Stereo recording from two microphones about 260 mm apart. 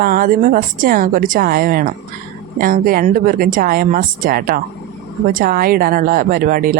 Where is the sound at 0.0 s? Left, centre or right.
Right.